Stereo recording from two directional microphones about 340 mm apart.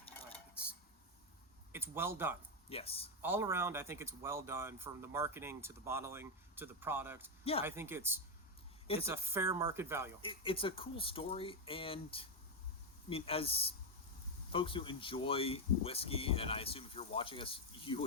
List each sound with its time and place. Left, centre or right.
0.6 s dishes: centre
1.7 s speech: centre
2.6 s speech: centre
3.2 s speech: centre
10.2 s speech: centre